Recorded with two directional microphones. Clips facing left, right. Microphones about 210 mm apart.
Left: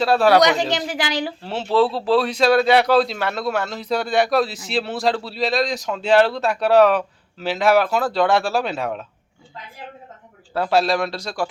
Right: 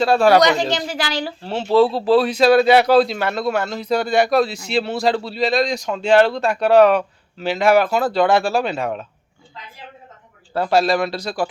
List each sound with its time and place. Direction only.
0.0 s a man's voice: centre (ahead or behind)
0.4 s a woman's voice: 15° left (ahead or behind)
1.5 s a man's voice: centre (ahead or behind)
10.5 s a man's voice: centre (ahead or behind)